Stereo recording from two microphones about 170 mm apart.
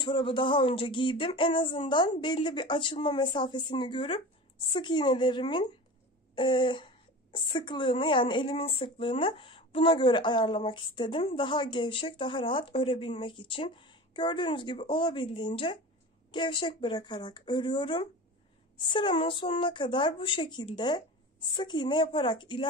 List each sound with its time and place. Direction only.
0.0 s speech: 30° left (ahead or behind)